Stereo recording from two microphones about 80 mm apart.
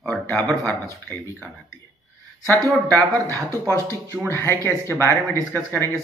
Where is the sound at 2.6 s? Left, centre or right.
Right.